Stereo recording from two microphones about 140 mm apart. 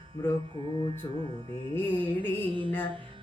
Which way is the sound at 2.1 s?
35° right (ahead or behind).